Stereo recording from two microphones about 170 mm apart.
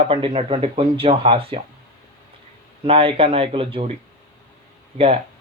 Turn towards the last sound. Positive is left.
turn(degrees=-35)  # may be behind; listen again after turning